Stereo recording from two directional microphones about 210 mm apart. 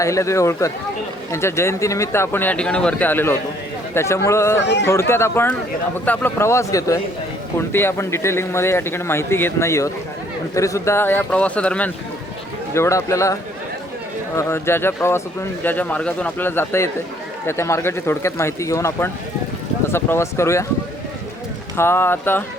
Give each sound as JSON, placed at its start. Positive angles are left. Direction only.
{"t": 0.0, "sound": "speech", "side_deg": 15}
{"t": 4.6, "sound": "speech", "side_deg": 55}
{"t": 4.9, "sound": "speech", "side_deg": 10}
{"t": 21.8, "sound": "speech", "side_deg": 10}